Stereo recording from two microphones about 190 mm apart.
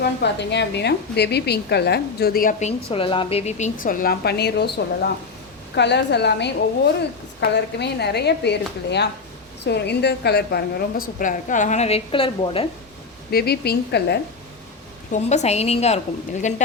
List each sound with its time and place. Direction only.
0.0 s a woman's voice: 65° left (ahead or behind)
7.5 s a woman's voice: 60° left (ahead or behind); by 12.6 s 30° left (ahead or behind)
13.3 s a woman's voice: 55° left (ahead or behind)
15.1 s a woman's voice: 35° left (ahead or behind)